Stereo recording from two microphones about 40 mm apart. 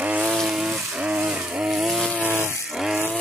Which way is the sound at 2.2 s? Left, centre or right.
Right.